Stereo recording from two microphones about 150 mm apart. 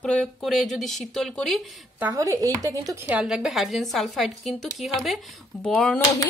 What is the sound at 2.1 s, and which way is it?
Speech, 20° right (ahead or behind).